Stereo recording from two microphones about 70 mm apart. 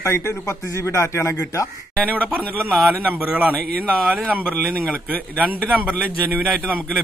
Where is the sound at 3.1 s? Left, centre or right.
Right.